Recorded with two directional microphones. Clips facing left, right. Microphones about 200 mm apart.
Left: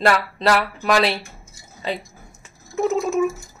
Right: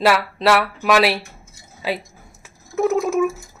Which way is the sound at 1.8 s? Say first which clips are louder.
Right 2 dB; 5° right (ahead or behind).